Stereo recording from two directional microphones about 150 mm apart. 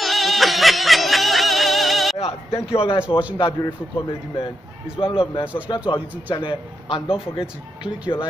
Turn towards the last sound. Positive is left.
turn(degrees=35)  # may be behind; listen again after turning